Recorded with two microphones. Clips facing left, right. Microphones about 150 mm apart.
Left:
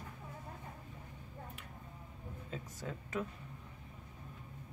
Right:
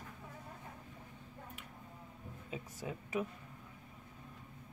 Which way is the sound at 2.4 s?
10° right (ahead or behind).